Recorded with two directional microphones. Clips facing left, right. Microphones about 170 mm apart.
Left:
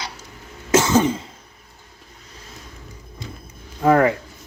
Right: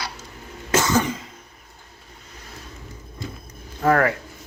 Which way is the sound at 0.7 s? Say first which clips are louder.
Left 4 dB; 20° left (ahead or behind).